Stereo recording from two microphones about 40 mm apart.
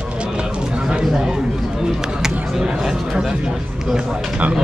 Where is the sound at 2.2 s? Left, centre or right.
Centre.